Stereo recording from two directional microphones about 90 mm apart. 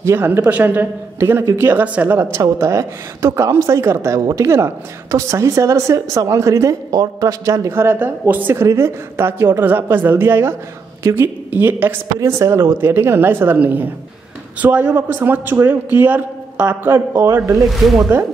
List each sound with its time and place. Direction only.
0.0 s a man's voice: 25° right (ahead or behind)
2.4 s a woman's voice: 35° right (ahead or behind); by 8.5 s 20° right (ahead or behind)
8.5 s a man's voice: 30° right (ahead or behind)